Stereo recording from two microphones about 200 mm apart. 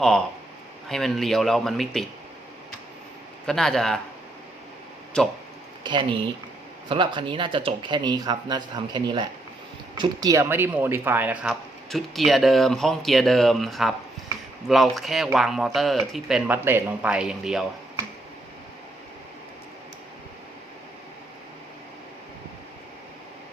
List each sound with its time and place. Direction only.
0.0 s speech: 5° left (ahead or behind)
3.4 s speech: centre (ahead or behind)
5.2 s speech: 5° left (ahead or behind)
5.8 s speech: 25° right (ahead or behind); by 17.7 s centre (ahead or behind)